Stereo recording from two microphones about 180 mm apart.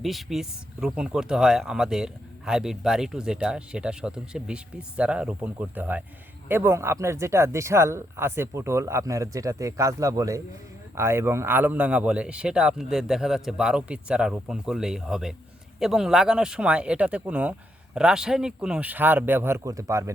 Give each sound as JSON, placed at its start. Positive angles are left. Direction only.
{"t": 0.0, "sound": "speech", "side_deg": 0}